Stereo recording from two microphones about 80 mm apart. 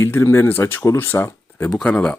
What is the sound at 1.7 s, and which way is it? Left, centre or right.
Speech, centre.